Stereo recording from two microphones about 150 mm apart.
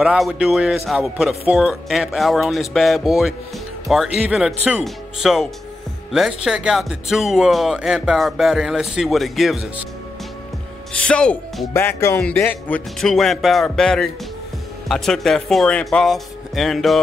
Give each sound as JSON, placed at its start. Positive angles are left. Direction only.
{"t": 0.0, "sound": "speech", "side_deg": -5}
{"t": 10.9, "sound": "speech", "side_deg": 5}